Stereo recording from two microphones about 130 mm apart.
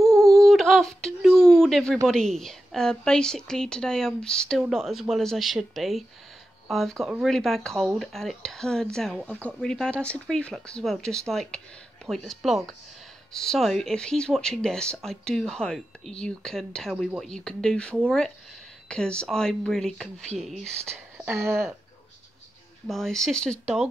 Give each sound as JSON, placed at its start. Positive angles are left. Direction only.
{"t": 0.1, "sound": "a sound", "side_deg": 0}
{"t": 2.0, "sound": "speech", "side_deg": 5}
{"t": 21.3, "sound": "speech", "side_deg": -20}
{"t": 22.8, "sound": "speech", "side_deg": 5}